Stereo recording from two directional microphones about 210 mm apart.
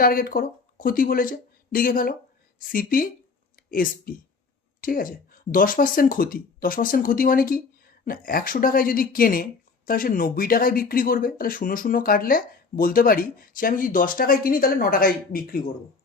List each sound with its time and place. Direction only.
0.0 s speech: 45° left (ahead or behind)